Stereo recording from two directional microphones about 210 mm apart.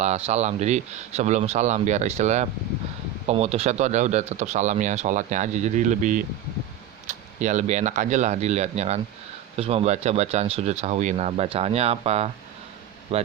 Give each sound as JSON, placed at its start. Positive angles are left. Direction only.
{"t": 0.0, "sound": "speech", "side_deg": -30}